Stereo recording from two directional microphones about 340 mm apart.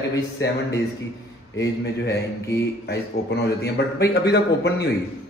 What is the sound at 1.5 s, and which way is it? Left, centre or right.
Speech, left.